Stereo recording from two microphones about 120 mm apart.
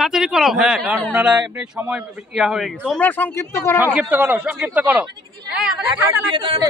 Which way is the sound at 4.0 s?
15° right (ahead or behind).